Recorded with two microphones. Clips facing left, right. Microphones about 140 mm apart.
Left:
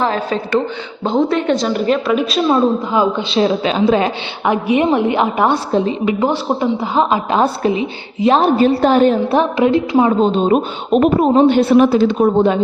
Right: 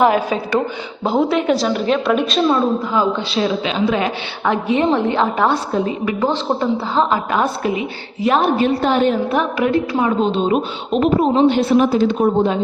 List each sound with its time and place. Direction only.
0.0 s a woman's voice: 10° right (ahead or behind)
2.9 s a man's voice: 20° left (ahead or behind); by 4.1 s 35° left (ahead or behind)
4.4 s a woman's voice: 10° left (ahead or behind)
7.3 s a woman's voice: 30° left (ahead or behind)
10.1 s a man's voice: 40° left (ahead or behind); by 12.5 s 75° left (ahead or behind)